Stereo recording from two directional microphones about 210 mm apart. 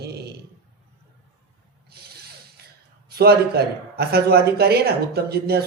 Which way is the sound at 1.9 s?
50° right (ahead or behind).